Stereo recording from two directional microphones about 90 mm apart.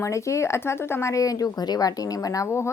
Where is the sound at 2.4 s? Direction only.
30° left (ahead or behind).